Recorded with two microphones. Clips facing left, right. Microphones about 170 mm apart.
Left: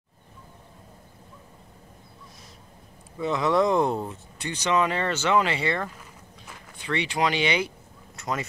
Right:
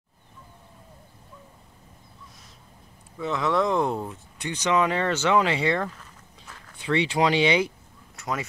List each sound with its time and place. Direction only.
3.2 s speech: 5° left (ahead or behind)
4.4 s speech: 15° right (ahead or behind)
5.9 s a sound: 10° left (ahead or behind)
7.2 s speech: 20° right (ahead or behind)
8.2 s speech: 5° right (ahead or behind)